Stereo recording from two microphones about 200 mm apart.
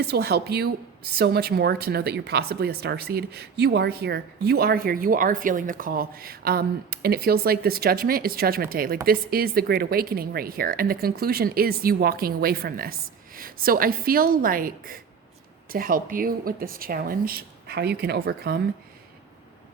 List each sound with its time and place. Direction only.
0.0 s speech: 55° right (ahead or behind)